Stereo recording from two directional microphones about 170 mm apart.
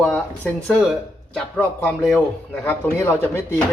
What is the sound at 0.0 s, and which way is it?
Speech, 5° left (ahead or behind).